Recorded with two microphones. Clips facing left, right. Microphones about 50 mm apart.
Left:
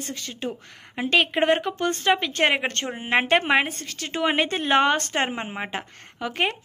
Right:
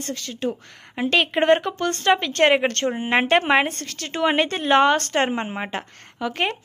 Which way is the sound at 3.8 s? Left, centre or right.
Centre.